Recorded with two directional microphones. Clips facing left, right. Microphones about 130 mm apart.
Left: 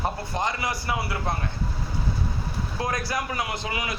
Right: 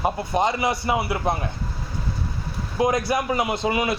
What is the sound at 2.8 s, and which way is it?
A man's voice, 20° right (ahead or behind).